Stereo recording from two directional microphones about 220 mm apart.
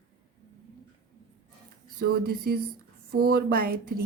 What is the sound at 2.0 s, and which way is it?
Speech, 45° right (ahead or behind).